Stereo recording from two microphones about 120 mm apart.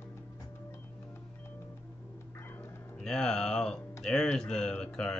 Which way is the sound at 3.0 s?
5° left (ahead or behind).